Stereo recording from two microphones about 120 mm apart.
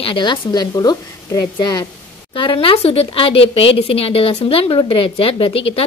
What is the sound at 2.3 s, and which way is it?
A woman's voice, 45° left (ahead or behind).